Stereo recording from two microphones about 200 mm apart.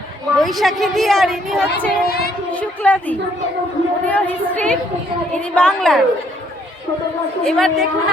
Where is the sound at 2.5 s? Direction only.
5° left (ahead or behind).